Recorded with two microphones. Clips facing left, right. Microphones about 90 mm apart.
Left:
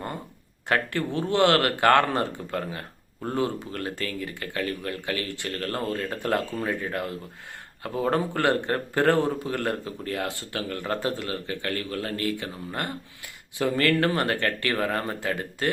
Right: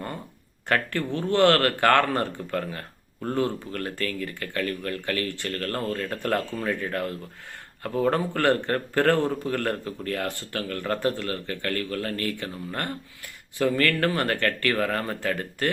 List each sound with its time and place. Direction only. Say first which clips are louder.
0.7 s a man's voice: even; 15° left (ahead or behind)